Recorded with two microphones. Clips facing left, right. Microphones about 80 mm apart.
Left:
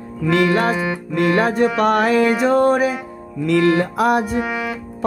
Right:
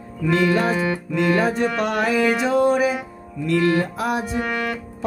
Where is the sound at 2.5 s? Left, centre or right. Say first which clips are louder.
Left 2 dB; left.